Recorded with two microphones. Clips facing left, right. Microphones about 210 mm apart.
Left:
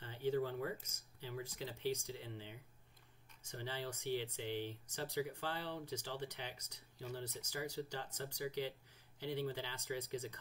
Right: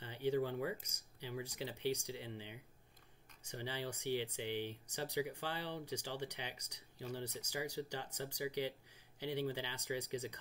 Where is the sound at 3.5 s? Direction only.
15° right (ahead or behind).